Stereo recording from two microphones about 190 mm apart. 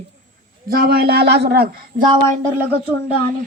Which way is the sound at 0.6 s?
50° right (ahead or behind).